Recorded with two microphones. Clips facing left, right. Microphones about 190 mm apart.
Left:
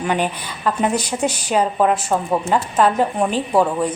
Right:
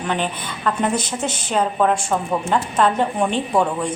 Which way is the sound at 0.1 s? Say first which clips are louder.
Left 1 dB; 10° left (ahead or behind).